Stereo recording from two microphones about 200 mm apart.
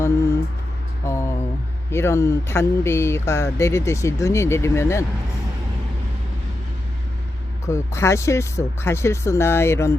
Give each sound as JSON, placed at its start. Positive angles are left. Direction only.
{"t": 0.0, "sound": "a sound", "side_deg": 15}
{"t": 1.9, "sound": "speech", "side_deg": 15}
{"t": 7.7, "sound": "speech", "side_deg": 15}